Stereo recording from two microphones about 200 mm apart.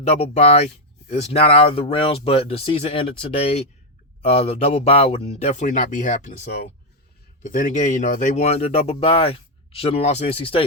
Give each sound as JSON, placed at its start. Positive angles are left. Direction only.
{"t": 0.0, "sound": "speech", "side_deg": 30}
{"t": 6.4, "sound": "speech", "side_deg": 55}
{"t": 7.4, "sound": "speech", "side_deg": 40}